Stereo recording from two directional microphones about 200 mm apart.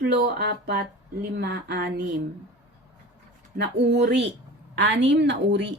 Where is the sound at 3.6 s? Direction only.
55° right (ahead or behind).